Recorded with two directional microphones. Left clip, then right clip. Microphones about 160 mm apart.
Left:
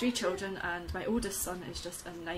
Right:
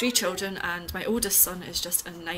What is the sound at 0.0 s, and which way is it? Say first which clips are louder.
A woman's voice: right 6 dB; 15° right (ahead or behind).